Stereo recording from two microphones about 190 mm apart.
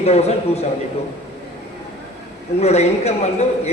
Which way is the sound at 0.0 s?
35° left (ahead or behind).